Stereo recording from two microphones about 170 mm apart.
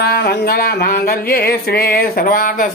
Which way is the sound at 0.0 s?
70° left (ahead or behind).